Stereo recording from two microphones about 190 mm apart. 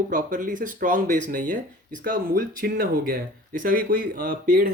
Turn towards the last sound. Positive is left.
turn(degrees=-50)  # may be behind; listen again after turning